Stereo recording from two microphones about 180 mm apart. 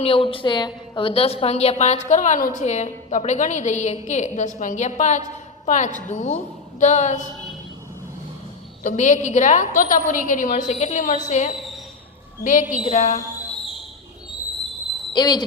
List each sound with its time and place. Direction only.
0.0 s a woman's voice: 30° left (ahead or behind)
8.8 s a woman's voice: 45° left (ahead or behind)
15.1 s speech: 25° left (ahead or behind)